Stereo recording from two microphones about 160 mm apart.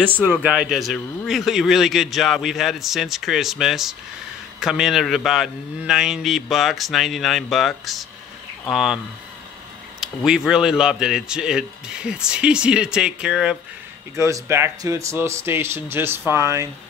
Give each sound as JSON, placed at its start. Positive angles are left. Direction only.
{"t": 0.4, "sound": "a man's voice", "side_deg": -5}
{"t": 14.1, "sound": "speech", "side_deg": -20}